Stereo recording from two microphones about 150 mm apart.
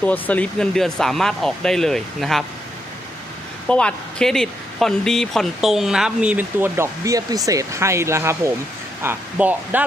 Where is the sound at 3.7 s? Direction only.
5° left (ahead or behind).